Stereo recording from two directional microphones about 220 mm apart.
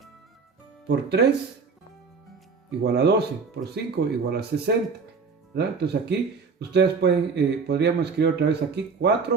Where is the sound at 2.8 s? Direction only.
50° right (ahead or behind).